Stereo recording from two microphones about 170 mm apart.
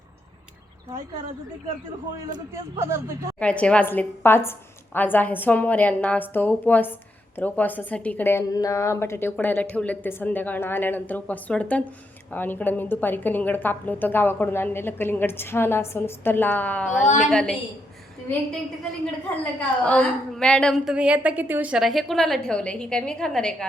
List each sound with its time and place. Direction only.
2.5 s speech: 15° right (ahead or behind)
3.4 s a woman's voice: 5° left (ahead or behind)
19.5 s a woman's voice: 10° left (ahead or behind)